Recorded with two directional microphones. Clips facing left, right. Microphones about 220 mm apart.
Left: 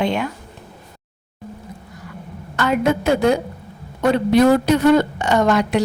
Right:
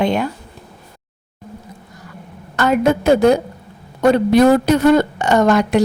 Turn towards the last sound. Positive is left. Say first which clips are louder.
# right 3 dB
turn(degrees=-45)  # may be behind; listen again after turning